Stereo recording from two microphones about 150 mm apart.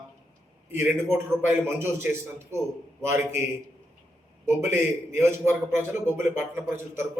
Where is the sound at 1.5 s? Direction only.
15° right (ahead or behind).